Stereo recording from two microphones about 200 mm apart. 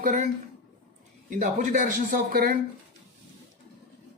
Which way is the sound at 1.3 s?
40° right (ahead or behind).